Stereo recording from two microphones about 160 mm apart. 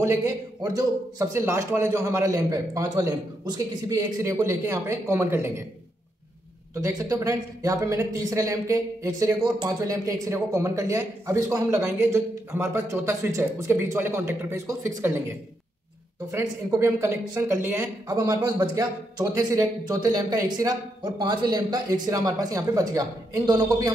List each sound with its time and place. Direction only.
0.0 s speech: 20° right (ahead or behind)
7.0 s a man's voice: 20° right (ahead or behind)
16.3 s speech: 15° right (ahead or behind)